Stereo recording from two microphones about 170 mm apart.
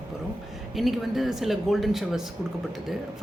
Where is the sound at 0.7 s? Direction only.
Centre (ahead or behind).